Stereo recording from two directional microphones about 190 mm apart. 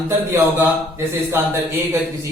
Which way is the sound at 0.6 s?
15° right (ahead or behind).